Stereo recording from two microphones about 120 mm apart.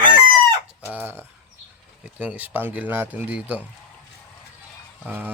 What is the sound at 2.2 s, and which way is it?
Speech, 15° right (ahead or behind).